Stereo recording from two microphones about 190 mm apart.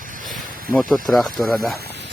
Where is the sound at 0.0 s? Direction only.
45° right (ahead or behind).